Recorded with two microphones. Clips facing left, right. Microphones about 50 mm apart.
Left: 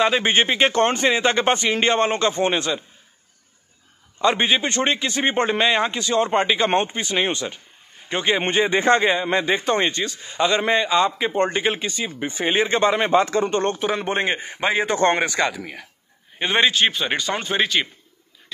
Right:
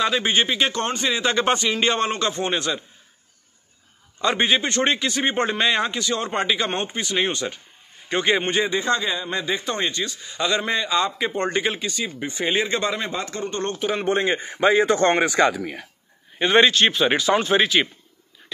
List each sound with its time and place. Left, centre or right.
0.0 s speech: left
1.1 s a man's voice: centre
4.2 s a man's voice: centre
7.3 s speech: centre
8.4 s a man's voice: left
8.6 s a man's voice: left
13.3 s speech: left
14.0 s speech: left
14.4 s speech: centre
15.0 s speech: left
15.6 s speech: centre
16.3 s speech: centre
16.9 s speech: centre